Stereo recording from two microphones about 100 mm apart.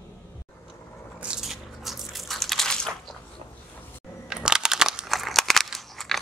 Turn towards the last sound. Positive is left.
turn(degrees=0)  # may be behind; listen again after turning